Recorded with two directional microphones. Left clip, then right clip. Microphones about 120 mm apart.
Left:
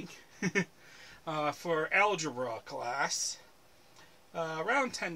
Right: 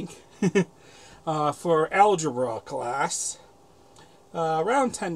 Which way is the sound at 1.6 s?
60° right (ahead or behind).